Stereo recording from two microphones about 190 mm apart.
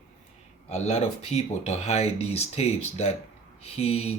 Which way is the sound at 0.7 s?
35° left (ahead or behind).